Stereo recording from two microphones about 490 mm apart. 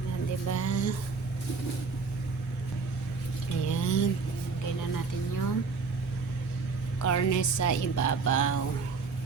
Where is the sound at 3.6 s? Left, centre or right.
Left.